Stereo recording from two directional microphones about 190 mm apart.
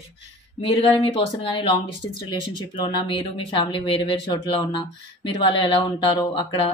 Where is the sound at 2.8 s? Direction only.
25° left (ahead or behind).